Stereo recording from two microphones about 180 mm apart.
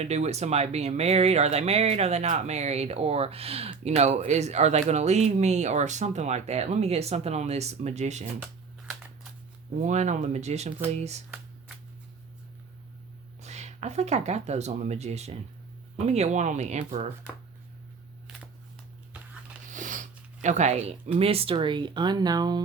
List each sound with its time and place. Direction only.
0.0 s speech: 35° right (ahead or behind)
9.8 s speech: 40° right (ahead or behind)
13.4 s speech: 40° right (ahead or behind)
19.7 s speech: 45° right (ahead or behind); by 22.6 s 20° right (ahead or behind)